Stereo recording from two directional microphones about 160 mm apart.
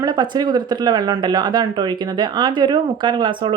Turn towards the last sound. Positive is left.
turn(degrees=-30)  # may be behind; listen again after turning